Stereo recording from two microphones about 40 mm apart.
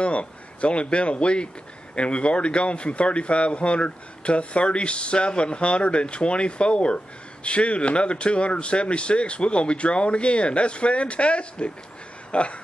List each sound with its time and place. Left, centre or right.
0.0 s speech: left